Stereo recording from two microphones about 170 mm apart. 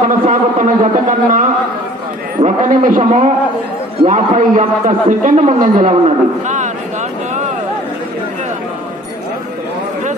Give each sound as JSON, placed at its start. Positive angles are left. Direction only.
{"t": 0.0, "sound": "a man's voice", "side_deg": -45}
{"t": 2.4, "sound": "a man's voice", "side_deg": -45}